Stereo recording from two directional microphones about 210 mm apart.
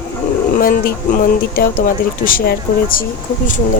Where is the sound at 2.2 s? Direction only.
45° left (ahead or behind).